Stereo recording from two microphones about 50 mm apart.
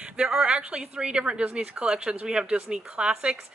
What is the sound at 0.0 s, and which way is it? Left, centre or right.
A woman's voice, centre.